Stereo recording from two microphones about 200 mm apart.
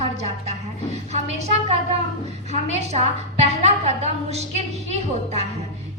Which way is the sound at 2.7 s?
35° right (ahead or behind).